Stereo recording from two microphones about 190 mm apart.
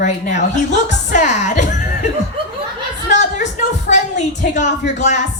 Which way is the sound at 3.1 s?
40° left (ahead or behind).